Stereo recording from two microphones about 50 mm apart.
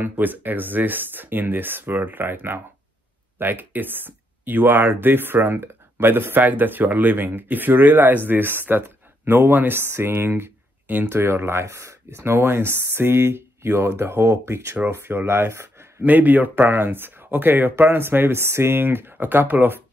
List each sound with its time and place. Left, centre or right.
0.0 s speech: right
6.4 s speech: right
11.6 s speech: right
12.2 s speech: right
14.9 s speech: right
16.0 s speech: right